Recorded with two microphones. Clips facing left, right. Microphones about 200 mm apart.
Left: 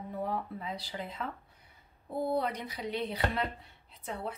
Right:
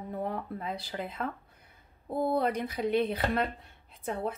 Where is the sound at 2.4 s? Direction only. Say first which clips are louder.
Right 5 dB; 50° right (ahead or behind).